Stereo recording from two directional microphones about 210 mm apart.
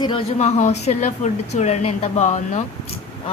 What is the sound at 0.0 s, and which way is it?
A woman's voice, 25° left (ahead or behind).